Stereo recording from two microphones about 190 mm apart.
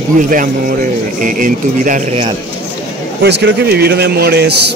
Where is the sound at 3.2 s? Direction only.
60° right (ahead or behind).